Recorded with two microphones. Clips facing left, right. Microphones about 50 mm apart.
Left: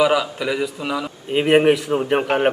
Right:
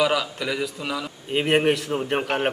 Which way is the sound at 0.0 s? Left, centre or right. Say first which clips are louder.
Left 5 dB; centre.